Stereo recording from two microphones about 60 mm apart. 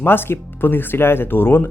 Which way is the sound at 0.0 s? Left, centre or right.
Left.